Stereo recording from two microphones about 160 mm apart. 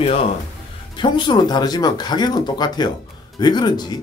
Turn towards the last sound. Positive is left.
turn(degrees=25)  # may be behind; listen again after turning